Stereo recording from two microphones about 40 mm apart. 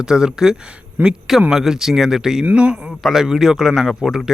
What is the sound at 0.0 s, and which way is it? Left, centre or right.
Speech, centre.